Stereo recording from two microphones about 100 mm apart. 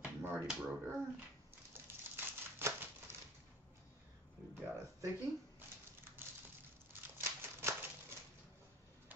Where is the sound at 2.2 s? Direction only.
25° right (ahead or behind).